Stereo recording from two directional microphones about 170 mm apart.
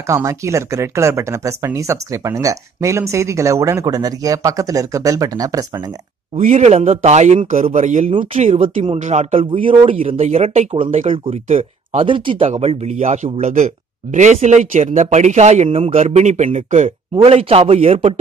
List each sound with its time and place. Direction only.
0.1 s speech: 20° right (ahead or behind)
6.3 s speech: 40° right (ahead or behind)
8.6 s speech: 30° right (ahead or behind)
9.0 s speech: 40° right (ahead or behind)